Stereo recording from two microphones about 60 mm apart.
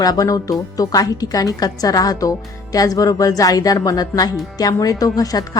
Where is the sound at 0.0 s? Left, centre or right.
Left.